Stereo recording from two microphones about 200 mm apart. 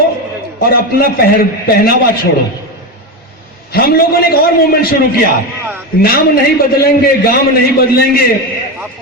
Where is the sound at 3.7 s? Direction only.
50° left (ahead or behind).